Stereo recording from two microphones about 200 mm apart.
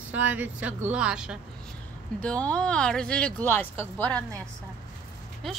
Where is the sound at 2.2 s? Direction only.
5° left (ahead or behind).